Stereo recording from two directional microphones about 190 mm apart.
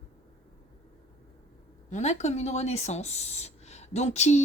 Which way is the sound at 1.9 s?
40° left (ahead or behind).